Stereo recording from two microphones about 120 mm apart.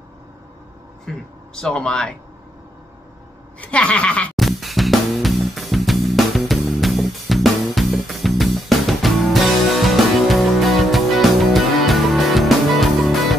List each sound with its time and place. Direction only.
1.0 s speech: 5° left (ahead or behind)
3.6 s a sound: 10° left (ahead or behind)
4.4 s music: centre (ahead or behind)